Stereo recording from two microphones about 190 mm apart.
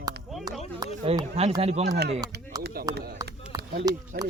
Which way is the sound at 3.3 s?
60° right (ahead or behind).